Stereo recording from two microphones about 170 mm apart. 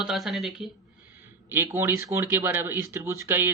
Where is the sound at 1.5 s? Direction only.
15° right (ahead or behind).